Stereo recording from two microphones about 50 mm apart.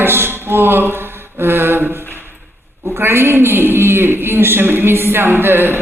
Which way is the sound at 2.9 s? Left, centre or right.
Right.